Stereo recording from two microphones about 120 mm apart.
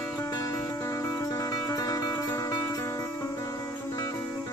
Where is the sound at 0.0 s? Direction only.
30° left (ahead or behind).